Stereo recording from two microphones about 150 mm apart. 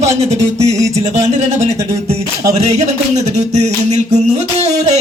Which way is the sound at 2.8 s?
50° right (ahead or behind).